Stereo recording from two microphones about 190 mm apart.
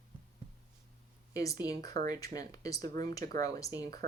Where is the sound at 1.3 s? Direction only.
20° left (ahead or behind).